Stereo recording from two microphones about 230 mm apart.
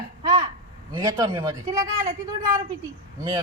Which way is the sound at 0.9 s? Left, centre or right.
Centre.